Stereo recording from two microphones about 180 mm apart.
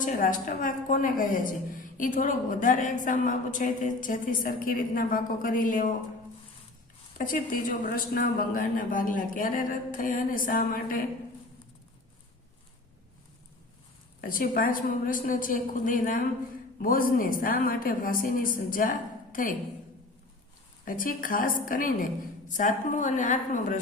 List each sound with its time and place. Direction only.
0.0 s a woman's voice: 45° left (ahead or behind)
7.2 s a woman's voice: 50° left (ahead or behind)
14.2 s a woman's voice: 50° left (ahead or behind)
20.8 s a woman's voice: 50° left (ahead or behind)